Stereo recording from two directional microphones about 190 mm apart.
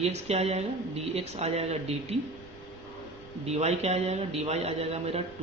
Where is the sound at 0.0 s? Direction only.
35° right (ahead or behind).